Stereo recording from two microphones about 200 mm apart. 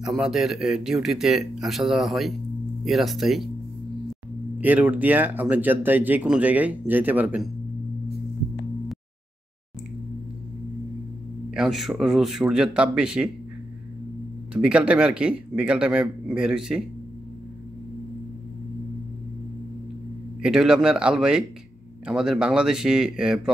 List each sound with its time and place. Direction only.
0.0 s speech: centre (ahead or behind)
4.6 s speech: 10° right (ahead or behind)
11.5 s speech: centre (ahead or behind)
14.5 s speech: 5° right (ahead or behind)
20.4 s speech: 5° right (ahead or behind)